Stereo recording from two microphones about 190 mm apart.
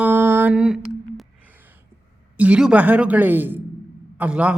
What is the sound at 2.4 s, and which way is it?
A man's voice, 5° right (ahead or behind).